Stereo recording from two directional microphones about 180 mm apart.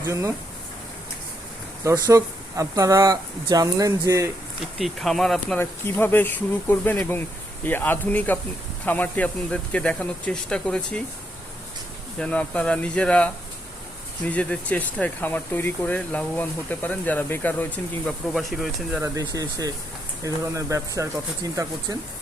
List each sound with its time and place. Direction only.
0.0 s speech: 15° right (ahead or behind)
1.8 s speech: 15° right (ahead or behind)
4.8 s speech: centre (ahead or behind)
5.5 s speech: 10° left (ahead or behind)
12.2 s speech: 5° left (ahead or behind)
19.0 s speech: 20° right (ahead or behind)